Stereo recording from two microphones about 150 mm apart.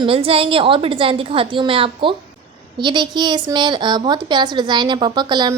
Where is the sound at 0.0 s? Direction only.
40° right (ahead or behind).